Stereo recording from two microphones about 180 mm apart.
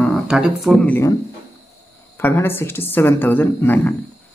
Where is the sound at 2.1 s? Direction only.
10° left (ahead or behind).